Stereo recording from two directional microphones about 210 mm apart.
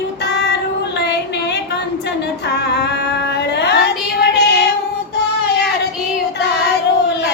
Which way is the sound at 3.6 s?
50° left (ahead or behind).